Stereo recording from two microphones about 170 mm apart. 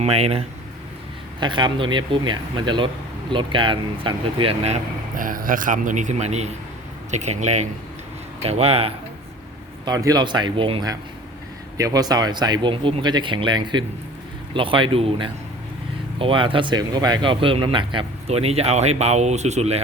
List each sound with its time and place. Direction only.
0.0 s speech: 35° right (ahead or behind)
5.1 s a man's voice: 55° right (ahead or behind); by 8.9 s 35° right (ahead or behind)
9.8 s speech: 20° right (ahead or behind); by 19.8 s 40° right (ahead or behind)